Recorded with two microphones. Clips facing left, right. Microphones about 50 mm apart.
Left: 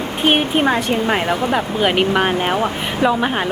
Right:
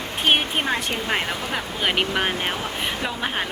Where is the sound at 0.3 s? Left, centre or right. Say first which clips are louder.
Left 5 dB; centre.